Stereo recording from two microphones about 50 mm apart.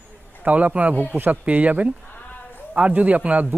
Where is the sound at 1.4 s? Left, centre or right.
Right.